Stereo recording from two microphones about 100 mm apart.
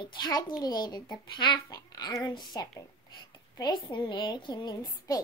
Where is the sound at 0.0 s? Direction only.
50° left (ahead or behind).